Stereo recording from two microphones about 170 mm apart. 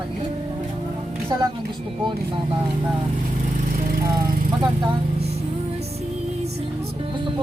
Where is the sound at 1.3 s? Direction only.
25° right (ahead or behind).